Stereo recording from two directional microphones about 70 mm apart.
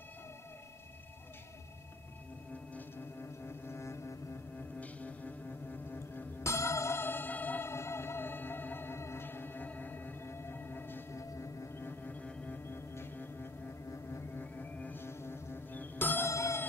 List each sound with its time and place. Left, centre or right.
3.0 s music: left
4.6 s music: left
7.7 s music: left
11.1 s singing bowl: left
11.8 s music: left
13.8 s music: left
14.4 s music: left
15.0 s music: left
15.7 s music: left
16.3 s music: left